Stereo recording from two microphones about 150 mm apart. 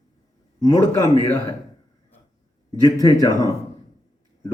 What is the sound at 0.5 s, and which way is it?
Speech, 25° left (ahead or behind).